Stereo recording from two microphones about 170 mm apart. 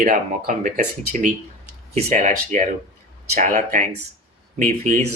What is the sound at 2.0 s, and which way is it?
Speech, 45° right (ahead or behind).